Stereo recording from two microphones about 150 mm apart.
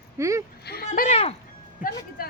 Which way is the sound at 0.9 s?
50° left (ahead or behind).